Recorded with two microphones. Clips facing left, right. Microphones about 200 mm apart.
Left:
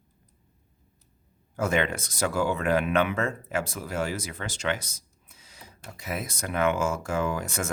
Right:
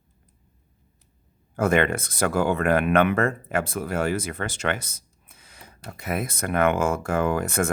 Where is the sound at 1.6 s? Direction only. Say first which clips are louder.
Right 5 dB; 55° right (ahead or behind).